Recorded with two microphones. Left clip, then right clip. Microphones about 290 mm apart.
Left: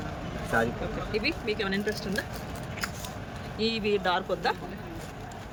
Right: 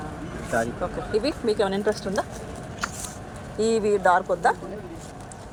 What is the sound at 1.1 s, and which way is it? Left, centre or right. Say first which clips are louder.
Speech: right 6 dB; centre.